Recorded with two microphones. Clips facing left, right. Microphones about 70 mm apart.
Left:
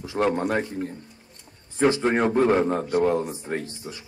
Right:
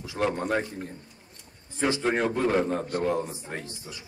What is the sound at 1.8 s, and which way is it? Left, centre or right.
Speech, left.